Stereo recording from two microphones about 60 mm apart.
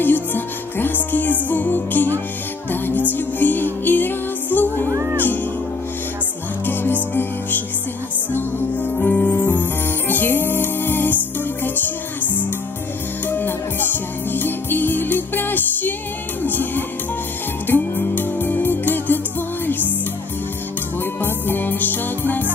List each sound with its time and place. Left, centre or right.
0.0 s music: left
6.7 s music: left
13.2 s music: left
21.0 s music: left